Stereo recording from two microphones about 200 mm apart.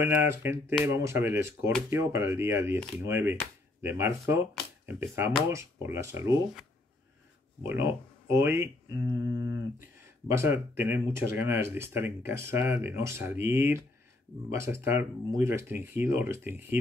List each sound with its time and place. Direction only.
0.0 s speech: 10° right (ahead or behind)
7.6 s speech: 15° right (ahead or behind)
9.3 s a sound: 65° left (ahead or behind)
10.2 s speech: 15° right (ahead or behind)